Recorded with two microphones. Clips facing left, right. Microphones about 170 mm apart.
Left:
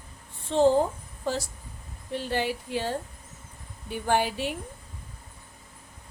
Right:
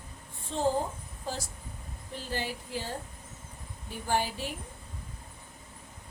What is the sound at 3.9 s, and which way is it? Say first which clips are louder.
Speech: left 5 dB; 70° left (ahead or behind).